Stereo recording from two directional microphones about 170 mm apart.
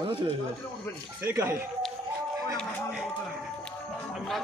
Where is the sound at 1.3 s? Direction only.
15° right (ahead or behind).